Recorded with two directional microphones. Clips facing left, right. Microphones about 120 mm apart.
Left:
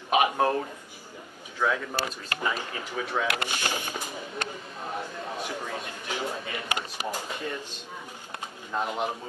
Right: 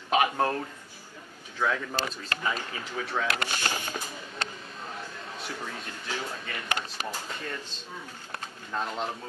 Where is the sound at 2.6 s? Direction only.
15° left (ahead or behind).